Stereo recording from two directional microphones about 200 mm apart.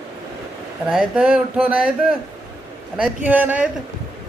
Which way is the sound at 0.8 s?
5° right (ahead or behind).